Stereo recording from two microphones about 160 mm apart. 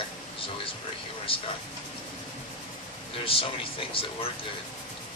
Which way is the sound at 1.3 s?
35° left (ahead or behind).